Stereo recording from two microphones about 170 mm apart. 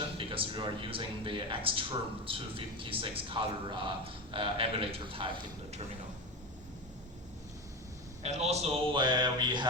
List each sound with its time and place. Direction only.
0.2 s speech: 30° right (ahead or behind)
8.2 s a man's voice: 40° right (ahead or behind)